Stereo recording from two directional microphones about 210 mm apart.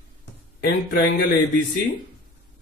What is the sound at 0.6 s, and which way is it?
Speech, 45° left (ahead or behind).